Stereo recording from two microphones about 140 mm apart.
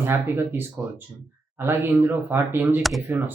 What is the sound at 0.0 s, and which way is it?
Speech, 15° right (ahead or behind).